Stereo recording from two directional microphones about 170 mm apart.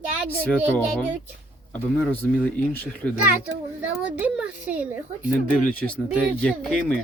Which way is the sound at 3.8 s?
5° right (ahead or behind).